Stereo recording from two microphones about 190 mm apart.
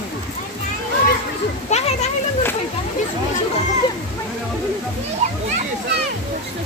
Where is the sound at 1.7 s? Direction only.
35° left (ahead or behind).